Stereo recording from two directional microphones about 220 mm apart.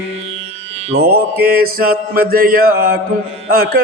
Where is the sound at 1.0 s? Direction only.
45° right (ahead or behind).